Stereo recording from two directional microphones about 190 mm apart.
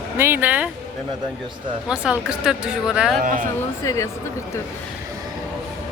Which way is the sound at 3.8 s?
15° left (ahead or behind).